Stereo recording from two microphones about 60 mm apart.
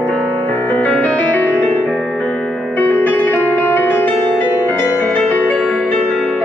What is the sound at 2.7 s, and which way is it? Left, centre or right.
Music, left.